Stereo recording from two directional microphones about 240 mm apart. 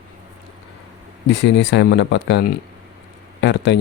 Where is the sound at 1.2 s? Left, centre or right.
Left.